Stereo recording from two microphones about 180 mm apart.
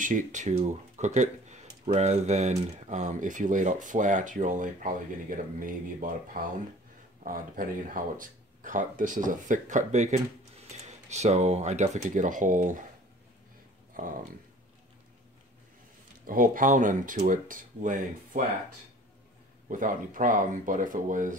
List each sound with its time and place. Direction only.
0.0 s speech: 45° right (ahead or behind)
14.0 s speech: 50° right (ahead or behind)
16.3 s speech: 50° right (ahead or behind)
19.7 s speech: 45° right (ahead or behind)